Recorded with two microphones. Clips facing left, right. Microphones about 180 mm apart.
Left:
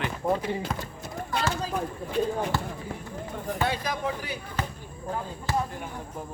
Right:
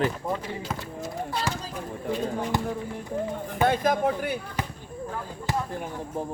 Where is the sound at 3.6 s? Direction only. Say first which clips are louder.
Right 7 dB; 50° right (ahead or behind).